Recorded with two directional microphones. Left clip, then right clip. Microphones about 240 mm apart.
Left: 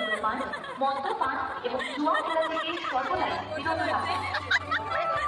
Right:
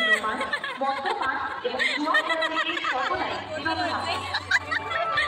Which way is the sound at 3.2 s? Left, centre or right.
Right.